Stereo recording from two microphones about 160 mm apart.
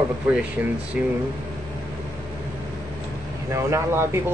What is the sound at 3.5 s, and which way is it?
Speech, 15° right (ahead or behind).